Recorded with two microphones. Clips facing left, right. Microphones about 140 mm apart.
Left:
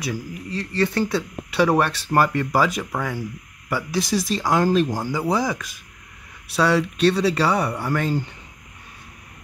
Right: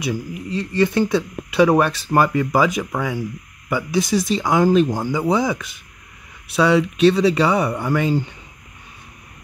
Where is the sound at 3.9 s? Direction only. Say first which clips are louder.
Right 4 dB; 20° right (ahead or behind).